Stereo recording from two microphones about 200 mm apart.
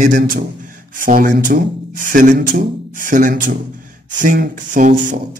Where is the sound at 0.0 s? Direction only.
40° right (ahead or behind).